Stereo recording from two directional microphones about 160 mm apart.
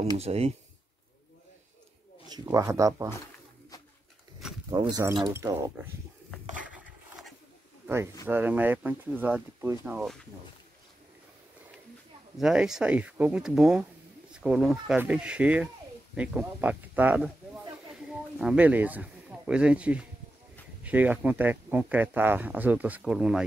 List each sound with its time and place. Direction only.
0.2 s speech: 40° right (ahead or behind)
2.4 s speech: 15° right (ahead or behind)
4.6 s speech: 25° right (ahead or behind)
6.5 s wood: 10° right (ahead or behind)
7.8 s bird: 15° right (ahead or behind)
8.3 s speech: 10° right (ahead or behind)
12.4 s speech: 5° right (ahead or behind)